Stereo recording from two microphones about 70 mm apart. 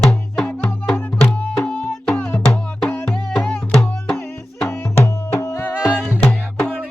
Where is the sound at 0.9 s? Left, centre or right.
Left.